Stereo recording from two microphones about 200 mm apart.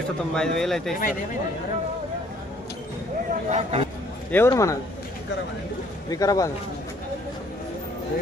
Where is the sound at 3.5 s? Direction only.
30° right (ahead or behind).